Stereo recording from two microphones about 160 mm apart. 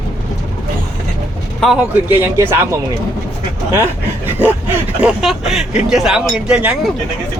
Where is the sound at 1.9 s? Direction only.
10° right (ahead or behind).